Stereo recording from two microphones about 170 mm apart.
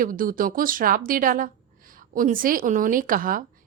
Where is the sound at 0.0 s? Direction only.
55° right (ahead or behind).